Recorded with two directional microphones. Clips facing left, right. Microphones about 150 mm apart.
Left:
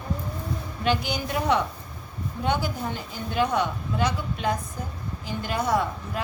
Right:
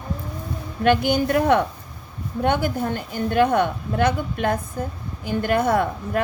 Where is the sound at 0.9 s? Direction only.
55° right (ahead or behind).